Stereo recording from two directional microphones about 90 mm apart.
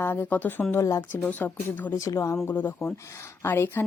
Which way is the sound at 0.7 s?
35° left (ahead or behind).